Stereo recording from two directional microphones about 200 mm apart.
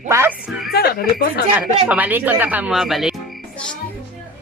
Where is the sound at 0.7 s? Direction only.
50° left (ahead or behind).